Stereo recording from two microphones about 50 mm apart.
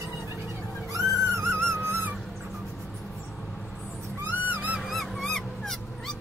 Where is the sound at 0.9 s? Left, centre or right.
Right.